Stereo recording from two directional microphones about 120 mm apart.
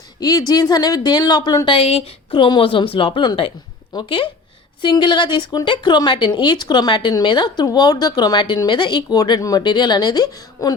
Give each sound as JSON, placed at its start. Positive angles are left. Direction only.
{"t": 0.2, "sound": "speech", "side_deg": 30}